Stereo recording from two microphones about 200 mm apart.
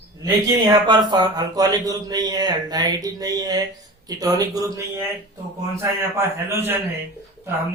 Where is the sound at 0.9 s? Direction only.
20° right (ahead or behind).